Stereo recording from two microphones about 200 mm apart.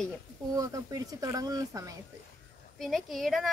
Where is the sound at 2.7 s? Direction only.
Centre (ahead or behind).